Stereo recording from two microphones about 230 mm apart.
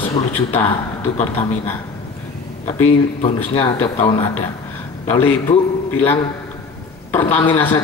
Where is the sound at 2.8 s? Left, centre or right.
Left.